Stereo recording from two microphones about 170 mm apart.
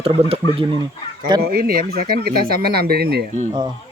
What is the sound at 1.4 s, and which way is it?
Speech, 60° right (ahead or behind).